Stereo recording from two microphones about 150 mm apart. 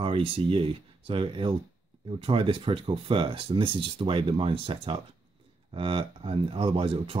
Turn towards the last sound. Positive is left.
turn(degrees=-40)  # may be behind; listen again after turning